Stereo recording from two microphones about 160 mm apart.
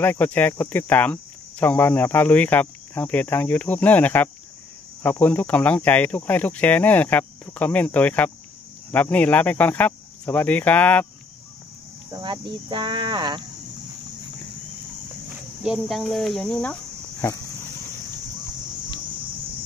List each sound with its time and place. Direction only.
0.0 s speech: 10° left (ahead or behind)
12.1 s speech: 25° right (ahead or behind)
15.6 s speech: 5° right (ahead or behind)